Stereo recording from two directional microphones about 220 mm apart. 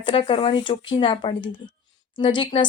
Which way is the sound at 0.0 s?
25° left (ahead or behind).